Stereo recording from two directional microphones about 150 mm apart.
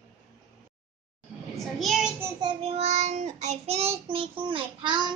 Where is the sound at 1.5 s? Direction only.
Centre (ahead or behind).